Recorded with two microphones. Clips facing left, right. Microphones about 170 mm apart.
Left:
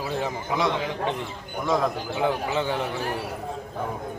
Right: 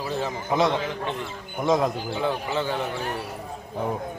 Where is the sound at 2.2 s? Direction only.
15° left (ahead or behind).